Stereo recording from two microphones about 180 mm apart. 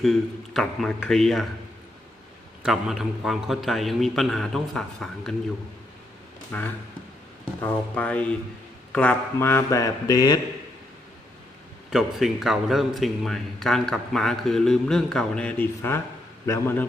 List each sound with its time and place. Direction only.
0.0 s a man's voice: centre (ahead or behind)
2.6 s a man's voice: 5° right (ahead or behind)
6.5 s speech: 10° left (ahead or behind)
11.9 s a man's voice: centre (ahead or behind)